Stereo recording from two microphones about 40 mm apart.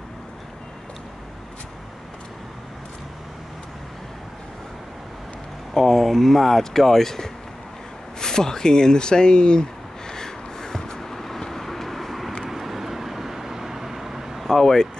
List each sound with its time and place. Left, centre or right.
5.8 s speech: centre
8.2 s a sound: centre
12.4 s vehicle: centre
14.5 s speech: centre